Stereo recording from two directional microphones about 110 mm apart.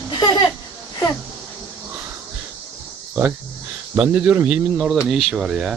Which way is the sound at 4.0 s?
15° right (ahead or behind).